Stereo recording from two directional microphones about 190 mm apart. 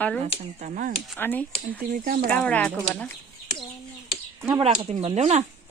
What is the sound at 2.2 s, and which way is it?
Speech, 5° left (ahead or behind).